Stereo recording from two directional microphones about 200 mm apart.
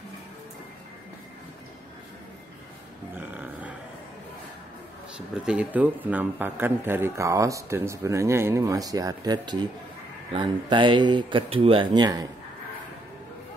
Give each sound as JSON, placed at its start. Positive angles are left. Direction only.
{"t": 3.2, "sound": "grunt", "side_deg": -10}
{"t": 5.1, "sound": "a man's voice", "side_deg": -5}